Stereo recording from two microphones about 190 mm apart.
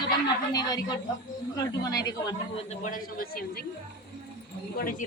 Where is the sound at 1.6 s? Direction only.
20° left (ahead or behind).